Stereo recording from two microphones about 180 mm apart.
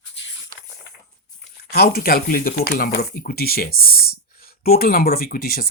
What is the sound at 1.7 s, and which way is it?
Speech, 60° left (ahead or behind).